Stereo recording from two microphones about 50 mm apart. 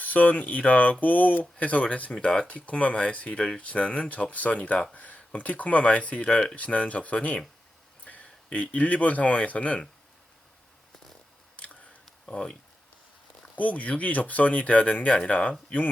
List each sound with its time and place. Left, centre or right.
0.0 s speech: left
11.5 s camera: left
12.2 s speech: left
13.6 s speech: left